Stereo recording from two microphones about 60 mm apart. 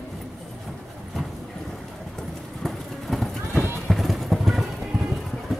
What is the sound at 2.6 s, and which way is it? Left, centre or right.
Vehicle, centre.